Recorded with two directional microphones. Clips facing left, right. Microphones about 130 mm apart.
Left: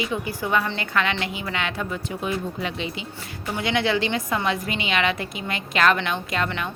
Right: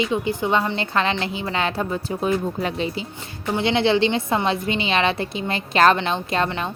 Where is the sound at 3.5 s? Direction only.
25° right (ahead or behind).